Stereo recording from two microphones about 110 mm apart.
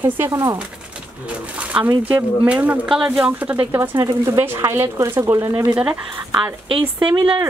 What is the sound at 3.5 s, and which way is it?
Speech, 20° right (ahead or behind).